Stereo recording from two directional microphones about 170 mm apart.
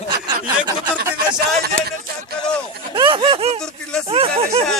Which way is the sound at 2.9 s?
30° right (ahead or behind).